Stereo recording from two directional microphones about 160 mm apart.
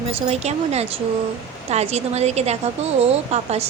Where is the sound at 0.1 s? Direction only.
40° right (ahead or behind).